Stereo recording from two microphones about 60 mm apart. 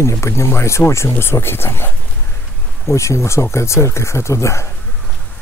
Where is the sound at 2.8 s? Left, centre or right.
Left.